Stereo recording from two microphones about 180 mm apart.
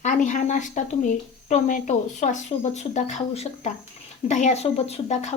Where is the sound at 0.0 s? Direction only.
45° left (ahead or behind).